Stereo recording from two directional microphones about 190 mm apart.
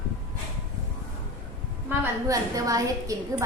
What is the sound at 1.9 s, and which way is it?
A woman's voice, 15° right (ahead or behind).